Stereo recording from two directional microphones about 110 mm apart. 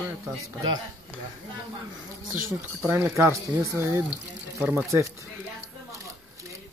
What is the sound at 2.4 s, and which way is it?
Speech, 20° right (ahead or behind).